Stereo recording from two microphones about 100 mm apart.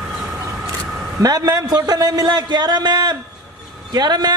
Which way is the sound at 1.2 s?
40° right (ahead or behind).